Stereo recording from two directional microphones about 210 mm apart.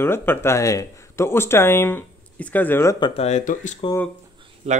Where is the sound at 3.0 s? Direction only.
30° left (ahead or behind).